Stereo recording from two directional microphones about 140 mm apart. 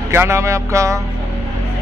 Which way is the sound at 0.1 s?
20° right (ahead or behind).